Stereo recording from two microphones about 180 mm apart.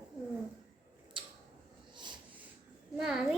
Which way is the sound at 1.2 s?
25° right (ahead or behind).